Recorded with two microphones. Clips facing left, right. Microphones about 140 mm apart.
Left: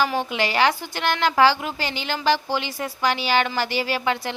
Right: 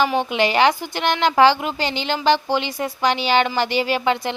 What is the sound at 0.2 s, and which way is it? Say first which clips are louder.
A woman's voice: right 4 dB; 20° right (ahead or behind).